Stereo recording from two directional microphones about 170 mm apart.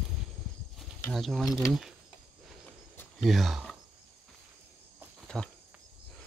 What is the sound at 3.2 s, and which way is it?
Speech, centre (ahead or behind).